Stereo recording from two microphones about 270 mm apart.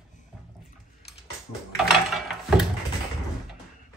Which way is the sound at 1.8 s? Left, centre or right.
Centre.